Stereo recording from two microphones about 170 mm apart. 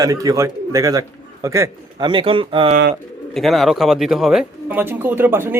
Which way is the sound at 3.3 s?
Centre (ahead or behind).